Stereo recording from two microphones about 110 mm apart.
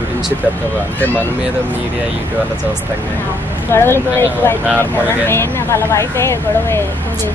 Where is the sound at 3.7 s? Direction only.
20° left (ahead or behind).